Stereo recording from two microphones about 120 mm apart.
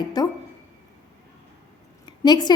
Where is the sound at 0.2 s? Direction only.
35° left (ahead or behind).